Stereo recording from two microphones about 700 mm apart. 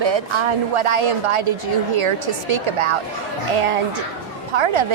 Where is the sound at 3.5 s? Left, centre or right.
Right.